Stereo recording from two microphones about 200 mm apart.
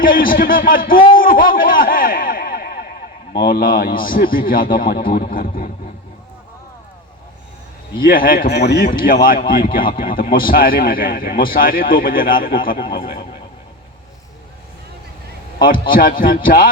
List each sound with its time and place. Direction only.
0.0 s a man's voice: 45° left (ahead or behind)
1.1 s a sound: 45° left (ahead or behind)
3.3 s a man's voice: 50° left (ahead or behind)
8.0 s a man's voice: 45° left (ahead or behind)
15.9 s a man's voice: 45° left (ahead or behind)